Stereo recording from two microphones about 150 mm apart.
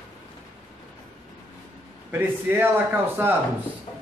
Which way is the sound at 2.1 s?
15° right (ahead or behind).